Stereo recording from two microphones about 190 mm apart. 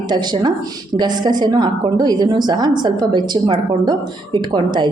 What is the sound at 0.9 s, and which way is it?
A woman's voice, 20° right (ahead or behind).